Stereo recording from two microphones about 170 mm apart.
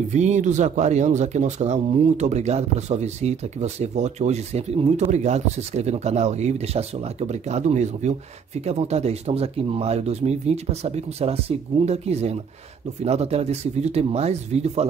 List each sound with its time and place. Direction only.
0.1 s speech: 45° right (ahead or behind)